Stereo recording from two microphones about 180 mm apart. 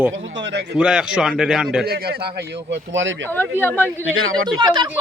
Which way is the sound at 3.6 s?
10° left (ahead or behind).